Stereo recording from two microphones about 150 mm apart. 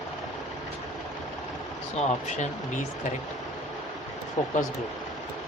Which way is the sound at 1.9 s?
50° left (ahead or behind).